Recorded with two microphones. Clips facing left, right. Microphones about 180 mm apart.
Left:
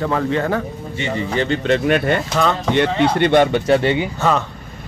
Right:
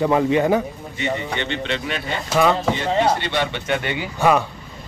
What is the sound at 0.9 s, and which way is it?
Speech, 30° left (ahead or behind).